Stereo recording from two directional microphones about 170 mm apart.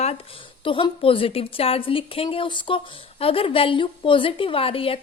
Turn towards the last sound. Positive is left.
turn(degrees=35)  # may be behind; listen again after turning